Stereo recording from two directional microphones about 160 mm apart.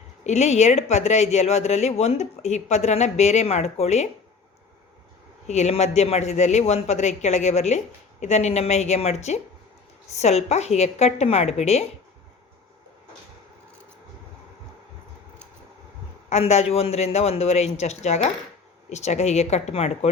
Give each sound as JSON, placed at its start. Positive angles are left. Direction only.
{"t": 0.3, "sound": "speech", "side_deg": 45}
{"t": 5.5, "sound": "speech", "side_deg": 45}
{"t": 16.3, "sound": "a man's voice", "side_deg": 45}